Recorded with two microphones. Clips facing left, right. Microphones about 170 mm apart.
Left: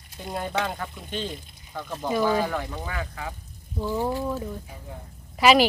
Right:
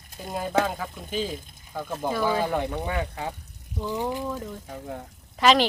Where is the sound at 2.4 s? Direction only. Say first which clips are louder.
Right 3 dB; 15° right (ahead or behind).